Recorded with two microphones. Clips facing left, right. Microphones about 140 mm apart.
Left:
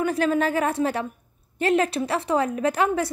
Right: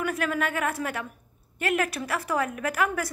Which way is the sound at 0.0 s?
30° left (ahead or behind).